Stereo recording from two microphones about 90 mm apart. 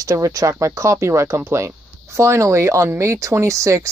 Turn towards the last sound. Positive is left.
turn(degrees=-35)  # may be behind; listen again after turning